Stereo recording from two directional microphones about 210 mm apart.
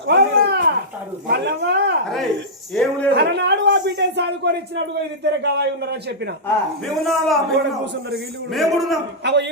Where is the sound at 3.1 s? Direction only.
55° right (ahead or behind).